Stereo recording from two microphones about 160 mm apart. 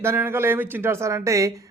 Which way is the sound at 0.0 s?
15° right (ahead or behind).